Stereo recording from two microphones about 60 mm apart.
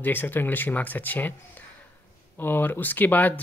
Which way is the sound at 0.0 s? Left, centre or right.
Left.